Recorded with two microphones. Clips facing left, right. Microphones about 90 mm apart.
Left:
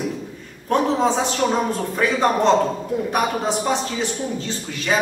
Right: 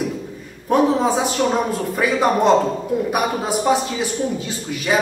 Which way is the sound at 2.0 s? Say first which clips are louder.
Right 1 dB; 10° right (ahead or behind).